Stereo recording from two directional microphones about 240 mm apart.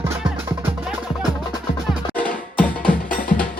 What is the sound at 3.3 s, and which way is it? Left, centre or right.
Music, left.